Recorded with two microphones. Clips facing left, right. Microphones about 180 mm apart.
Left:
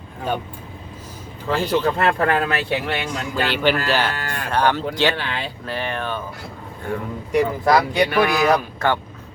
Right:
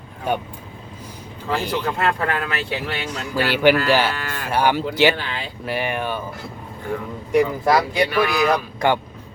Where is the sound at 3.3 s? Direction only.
10° right (ahead or behind).